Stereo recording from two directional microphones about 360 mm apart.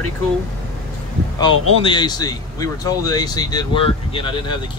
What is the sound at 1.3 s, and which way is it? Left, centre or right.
Speech, centre.